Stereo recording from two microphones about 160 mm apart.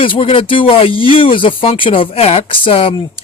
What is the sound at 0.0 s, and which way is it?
Speech, 35° left (ahead or behind).